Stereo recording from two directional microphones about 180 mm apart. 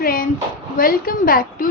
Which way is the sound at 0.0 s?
50° left (ahead or behind).